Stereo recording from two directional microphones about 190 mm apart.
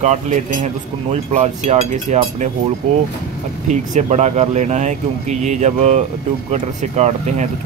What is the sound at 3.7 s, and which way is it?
Speech, 40° right (ahead or behind).